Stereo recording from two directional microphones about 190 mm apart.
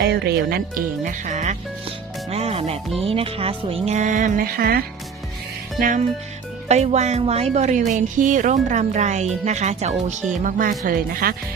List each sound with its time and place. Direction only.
0.0 s speech: 60° right (ahead or behind)
6.7 s speech: 35° right (ahead or behind)